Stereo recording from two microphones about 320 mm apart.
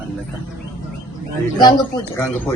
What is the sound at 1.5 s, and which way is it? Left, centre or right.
Speech, centre.